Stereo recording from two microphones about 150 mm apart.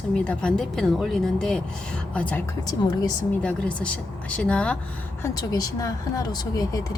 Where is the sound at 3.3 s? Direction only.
10° left (ahead or behind).